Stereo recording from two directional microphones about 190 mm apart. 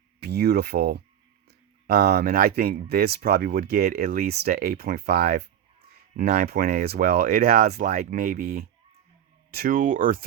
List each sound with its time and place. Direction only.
0.2 s speech: 55° right (ahead or behind)